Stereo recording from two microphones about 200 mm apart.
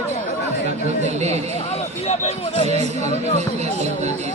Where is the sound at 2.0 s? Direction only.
30° left (ahead or behind).